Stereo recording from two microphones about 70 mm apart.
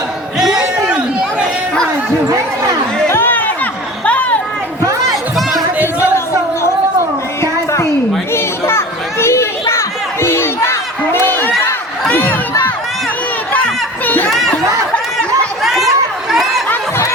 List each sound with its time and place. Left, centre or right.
0.3 s chatter: centre
3.1 s chatter: left
5.4 s music: centre
6.0 s a sound: left
8.3 s children playing: left
12.0 s crowd: left
13.5 s a sound: left
14.3 s chatter: centre
15.6 s chatter: centre